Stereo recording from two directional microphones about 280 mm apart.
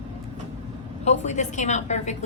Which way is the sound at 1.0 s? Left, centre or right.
Left.